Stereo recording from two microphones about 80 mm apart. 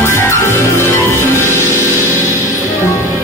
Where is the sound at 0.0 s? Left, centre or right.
Left.